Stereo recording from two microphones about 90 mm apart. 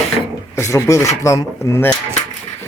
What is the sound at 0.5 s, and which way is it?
Speech, 30° left (ahead or behind).